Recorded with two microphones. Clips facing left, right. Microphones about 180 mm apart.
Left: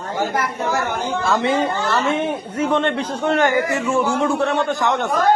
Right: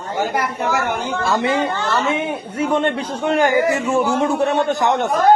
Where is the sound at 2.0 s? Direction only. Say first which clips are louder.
Left 1 dB; 5° right (ahead or behind).